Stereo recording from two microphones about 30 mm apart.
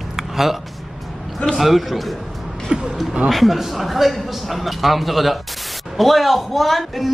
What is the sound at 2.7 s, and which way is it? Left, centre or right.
Speech, right.